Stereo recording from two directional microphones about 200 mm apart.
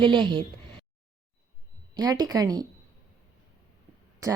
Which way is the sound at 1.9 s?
20° right (ahead or behind).